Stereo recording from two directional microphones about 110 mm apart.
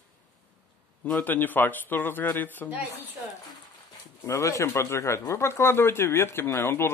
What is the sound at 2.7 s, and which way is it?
Speech, 15° right (ahead or behind).